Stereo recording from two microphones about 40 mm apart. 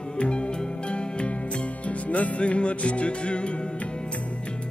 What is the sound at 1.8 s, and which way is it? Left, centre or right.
Music, left.